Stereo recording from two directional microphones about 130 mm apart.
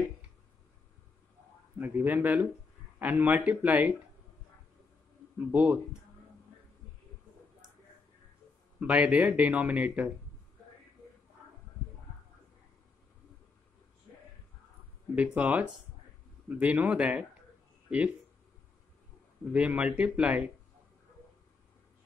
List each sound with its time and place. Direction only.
1.8 s speech: 15° right (ahead or behind)
5.5 s speech: 10° right (ahead or behind)
8.7 s speech: 10° right (ahead or behind)
15.3 s speech: 10° right (ahead or behind)
19.5 s speech: 10° right (ahead or behind)